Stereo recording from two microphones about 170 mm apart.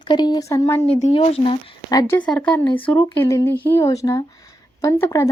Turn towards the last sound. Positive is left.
turn(degrees=15)  # may be behind; listen again after turning